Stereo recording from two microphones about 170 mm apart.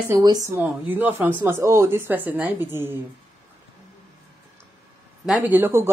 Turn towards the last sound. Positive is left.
turn(degrees=-15)  # may be behind; listen again after turning